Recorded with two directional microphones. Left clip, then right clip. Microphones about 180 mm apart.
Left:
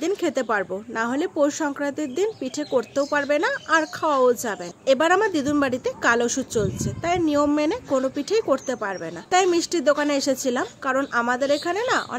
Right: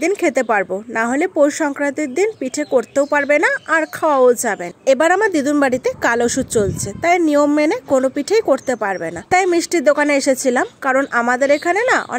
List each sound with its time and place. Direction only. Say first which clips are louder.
0.0 s speech: right 7 dB; 40° right (ahead or behind)